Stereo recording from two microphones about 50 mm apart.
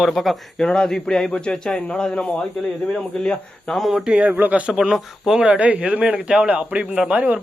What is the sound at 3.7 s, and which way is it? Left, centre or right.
Speech, centre.